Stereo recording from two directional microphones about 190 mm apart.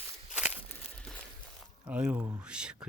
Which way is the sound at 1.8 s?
5° right (ahead or behind).